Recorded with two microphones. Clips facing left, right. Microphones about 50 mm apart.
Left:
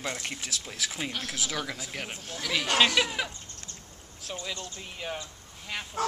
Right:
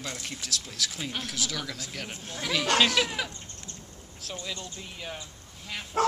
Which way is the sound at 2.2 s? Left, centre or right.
Right.